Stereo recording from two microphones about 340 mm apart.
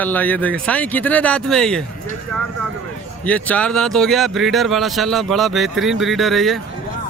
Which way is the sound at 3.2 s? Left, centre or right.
Centre.